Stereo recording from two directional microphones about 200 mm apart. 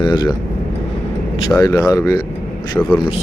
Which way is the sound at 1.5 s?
15° left (ahead or behind).